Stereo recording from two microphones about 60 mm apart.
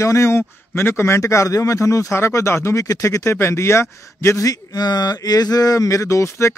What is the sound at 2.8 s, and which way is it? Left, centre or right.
Speech, left.